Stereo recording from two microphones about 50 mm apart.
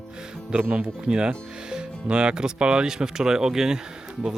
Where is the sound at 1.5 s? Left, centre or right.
Centre.